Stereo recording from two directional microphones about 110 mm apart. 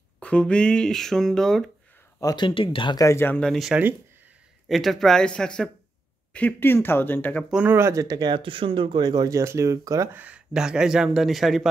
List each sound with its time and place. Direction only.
0.2 s speech: 10° left (ahead or behind)
2.3 s speech: 50° left (ahead or behind)
3.0 s speech: 25° left (ahead or behind)
3.3 s speech: centre (ahead or behind)
7.7 s speech: 25° right (ahead or behind)
10.1 s speech: 10° right (ahead or behind)